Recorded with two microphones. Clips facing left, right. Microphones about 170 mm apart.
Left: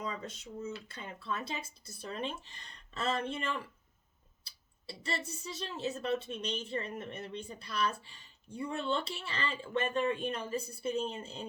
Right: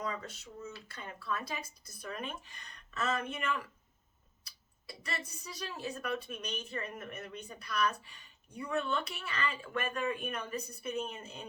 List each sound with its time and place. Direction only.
0.0 s speech: 20° left (ahead or behind)